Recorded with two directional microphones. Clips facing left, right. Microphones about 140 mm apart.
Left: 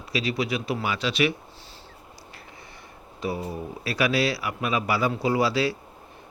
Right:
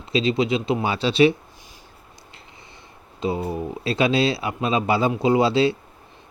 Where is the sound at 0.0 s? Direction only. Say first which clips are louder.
Right 6 dB; 25° right (ahead or behind).